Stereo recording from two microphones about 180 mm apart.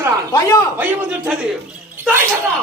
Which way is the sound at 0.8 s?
10° right (ahead or behind).